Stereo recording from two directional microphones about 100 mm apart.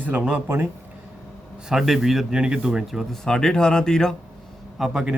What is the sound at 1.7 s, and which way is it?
Speech, centre (ahead or behind).